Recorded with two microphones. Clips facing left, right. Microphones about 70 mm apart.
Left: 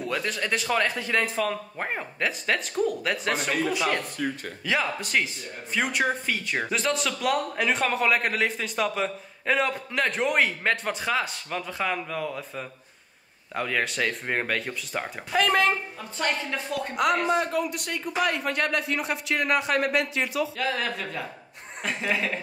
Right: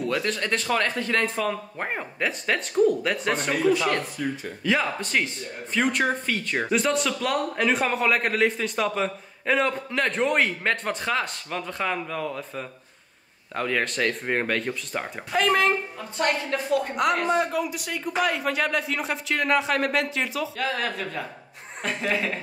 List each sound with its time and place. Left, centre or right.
0.1 s speech: centre
4.2 s speech: left
4.6 s speech: centre